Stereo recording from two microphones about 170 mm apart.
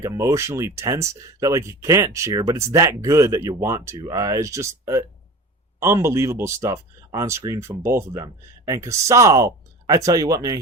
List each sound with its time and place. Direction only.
0.0 s speech: 20° right (ahead or behind)